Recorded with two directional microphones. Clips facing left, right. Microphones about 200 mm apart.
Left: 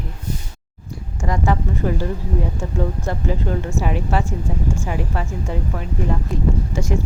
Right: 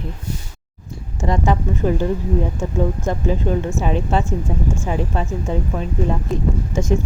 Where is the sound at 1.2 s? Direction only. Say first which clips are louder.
Right 2 dB; 20° right (ahead or behind).